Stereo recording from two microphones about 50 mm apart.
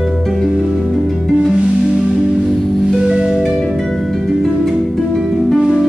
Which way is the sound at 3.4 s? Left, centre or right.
Centre.